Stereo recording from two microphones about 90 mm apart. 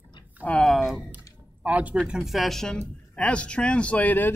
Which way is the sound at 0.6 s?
Centre (ahead or behind).